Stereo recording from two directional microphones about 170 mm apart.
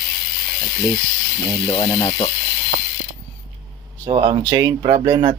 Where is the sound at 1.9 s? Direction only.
25° left (ahead or behind).